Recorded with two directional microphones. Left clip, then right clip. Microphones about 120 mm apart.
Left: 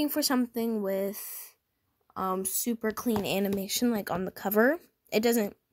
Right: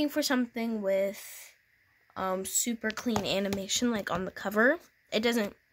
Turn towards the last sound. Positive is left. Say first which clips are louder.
# left 2 dB
turn(degrees=30)  # may be behind; listen again after turning